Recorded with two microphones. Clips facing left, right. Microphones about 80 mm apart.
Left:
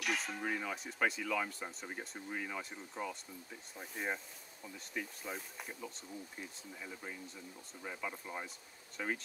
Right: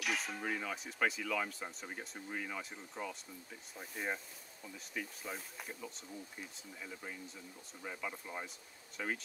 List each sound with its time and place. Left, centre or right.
0.0 s speech: centre